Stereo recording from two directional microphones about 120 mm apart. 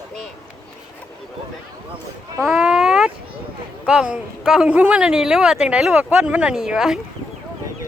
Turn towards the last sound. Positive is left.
turn(degrees=-5)  # may be behind; listen again after turning